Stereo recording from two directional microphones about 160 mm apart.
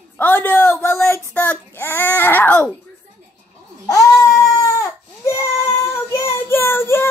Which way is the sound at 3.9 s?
20° left (ahead or behind).